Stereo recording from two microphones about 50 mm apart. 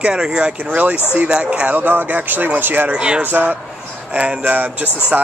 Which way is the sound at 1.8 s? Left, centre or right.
Right.